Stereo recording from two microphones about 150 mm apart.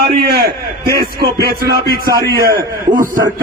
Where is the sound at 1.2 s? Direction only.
90° right.